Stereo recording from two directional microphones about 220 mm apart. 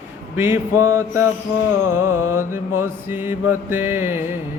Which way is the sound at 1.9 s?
80° left.